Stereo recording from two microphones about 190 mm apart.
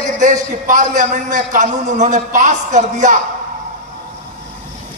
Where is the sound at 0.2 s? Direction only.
40° right (ahead or behind).